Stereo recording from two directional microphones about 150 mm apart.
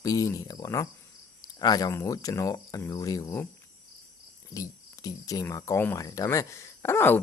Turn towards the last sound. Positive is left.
turn(degrees=15)  # may be behind; listen again after turning